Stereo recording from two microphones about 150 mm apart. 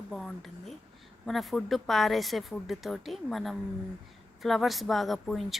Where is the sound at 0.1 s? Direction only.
5° left (ahead or behind).